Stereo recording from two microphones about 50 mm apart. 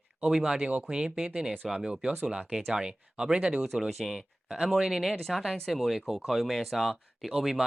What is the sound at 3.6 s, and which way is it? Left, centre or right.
Speech, centre.